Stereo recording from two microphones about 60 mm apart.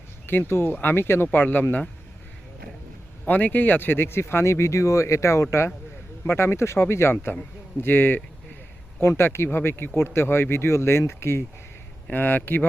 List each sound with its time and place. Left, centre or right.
0.3 s speech: left
3.2 s speech: left
12.1 s speech: left